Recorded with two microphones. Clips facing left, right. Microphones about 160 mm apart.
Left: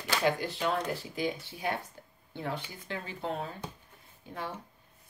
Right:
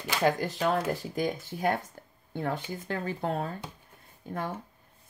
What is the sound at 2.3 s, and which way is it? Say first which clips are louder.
Speech: right 5 dB; 50° right (ahead or behind).